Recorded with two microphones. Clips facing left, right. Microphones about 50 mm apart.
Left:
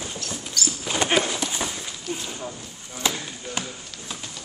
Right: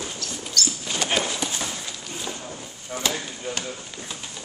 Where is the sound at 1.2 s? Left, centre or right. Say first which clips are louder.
Left 1 dB; centre.